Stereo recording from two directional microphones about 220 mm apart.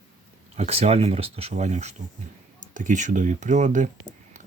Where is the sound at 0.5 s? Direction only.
30° right (ahead or behind).